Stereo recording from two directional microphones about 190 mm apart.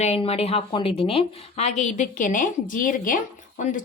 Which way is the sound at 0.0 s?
35° left (ahead or behind).